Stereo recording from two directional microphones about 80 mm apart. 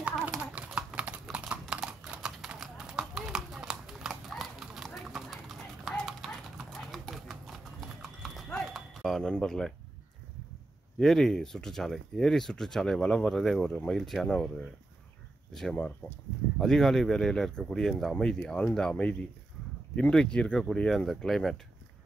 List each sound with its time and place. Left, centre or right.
0.0 s typing: centre
1.3 s clip-clop: centre
8.5 s livestock: centre
11.0 s speech: centre
15.5 s speech: centre